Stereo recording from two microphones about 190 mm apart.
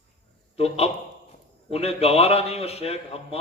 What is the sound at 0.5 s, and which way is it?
A man's voice, 30° left (ahead or behind).